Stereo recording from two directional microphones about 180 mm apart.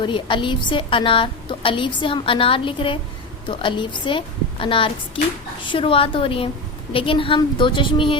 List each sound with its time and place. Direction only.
0.0 s a woman's voice: 25° left (ahead or behind)